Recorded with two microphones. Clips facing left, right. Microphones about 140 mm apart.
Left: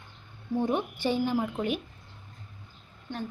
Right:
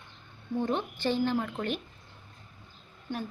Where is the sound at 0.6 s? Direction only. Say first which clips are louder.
Left 2 dB; 10° left (ahead or behind).